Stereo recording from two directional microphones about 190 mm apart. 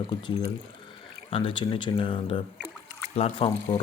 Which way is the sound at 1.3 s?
30° left (ahead or behind).